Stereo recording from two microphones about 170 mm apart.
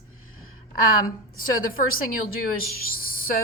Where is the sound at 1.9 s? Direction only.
60° left (ahead or behind).